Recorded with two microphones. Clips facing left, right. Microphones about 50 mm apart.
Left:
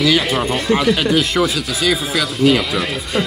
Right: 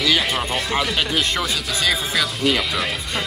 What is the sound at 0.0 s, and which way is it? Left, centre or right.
Speech, centre.